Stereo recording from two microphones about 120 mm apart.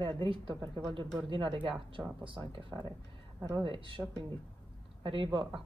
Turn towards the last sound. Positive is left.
turn(degrees=-45)  # may be behind; listen again after turning